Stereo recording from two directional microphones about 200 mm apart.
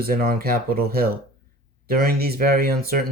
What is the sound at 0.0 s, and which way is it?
Speech, 50° right (ahead or behind).